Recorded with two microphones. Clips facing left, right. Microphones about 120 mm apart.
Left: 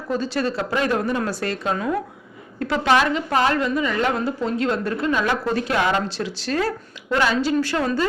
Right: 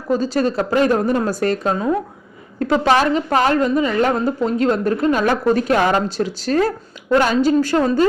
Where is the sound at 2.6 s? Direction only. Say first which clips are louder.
Right 4 dB; 40° right (ahead or behind).